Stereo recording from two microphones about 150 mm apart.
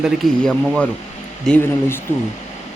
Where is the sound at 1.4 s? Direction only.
10° left (ahead or behind).